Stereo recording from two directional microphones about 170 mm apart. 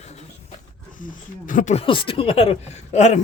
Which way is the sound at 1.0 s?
50° left (ahead or behind).